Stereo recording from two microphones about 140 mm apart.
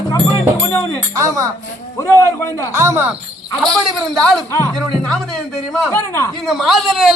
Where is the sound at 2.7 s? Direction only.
20° right (ahead or behind).